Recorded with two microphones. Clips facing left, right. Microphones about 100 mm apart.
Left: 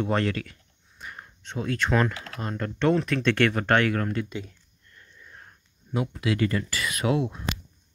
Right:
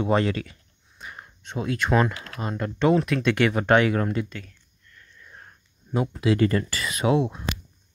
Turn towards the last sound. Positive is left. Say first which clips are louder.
# right 3 dB
turn(degrees=-25)  # may be behind; listen again after turning